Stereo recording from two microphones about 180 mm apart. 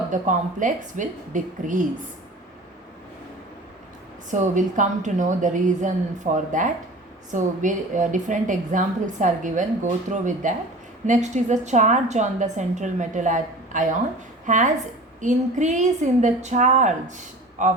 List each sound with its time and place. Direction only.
0.1 s a woman's voice: 45° right (ahead or behind)
4.3 s a woman's voice: 45° right (ahead or behind)